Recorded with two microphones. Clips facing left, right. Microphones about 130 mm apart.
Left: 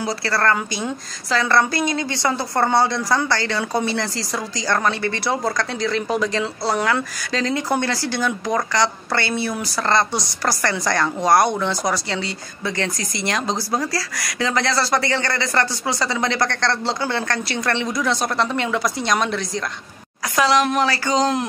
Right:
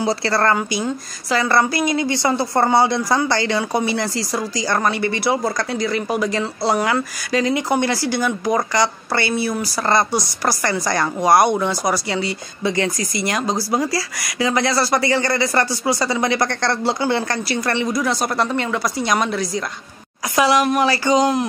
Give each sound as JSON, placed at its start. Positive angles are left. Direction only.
{"t": 0.0, "sound": "speech", "side_deg": -25}
{"t": 0.6, "sound": "a woman's voice", "side_deg": 0}